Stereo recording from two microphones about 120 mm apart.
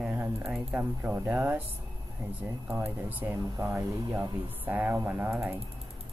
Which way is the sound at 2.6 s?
15° right (ahead or behind).